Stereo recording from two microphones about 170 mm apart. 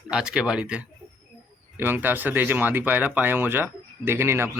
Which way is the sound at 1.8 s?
10° right (ahead or behind).